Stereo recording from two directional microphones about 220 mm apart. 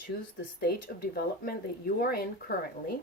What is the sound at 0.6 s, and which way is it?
Speech, 45° left (ahead or behind).